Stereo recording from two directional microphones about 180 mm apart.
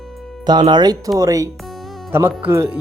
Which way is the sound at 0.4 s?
25° right (ahead or behind).